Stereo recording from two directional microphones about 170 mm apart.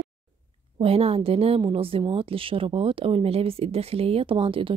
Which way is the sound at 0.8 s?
35° right (ahead or behind).